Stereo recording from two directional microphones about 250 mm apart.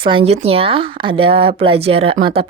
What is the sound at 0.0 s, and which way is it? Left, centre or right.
Speech, right.